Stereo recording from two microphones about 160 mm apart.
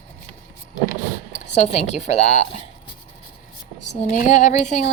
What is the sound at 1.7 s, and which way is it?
Speech, 45° left (ahead or behind).